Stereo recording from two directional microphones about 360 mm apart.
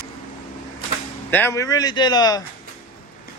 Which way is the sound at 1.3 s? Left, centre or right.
Centre.